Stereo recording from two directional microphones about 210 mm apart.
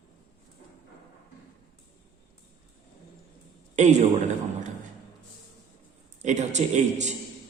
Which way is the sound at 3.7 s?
35° right (ahead or behind).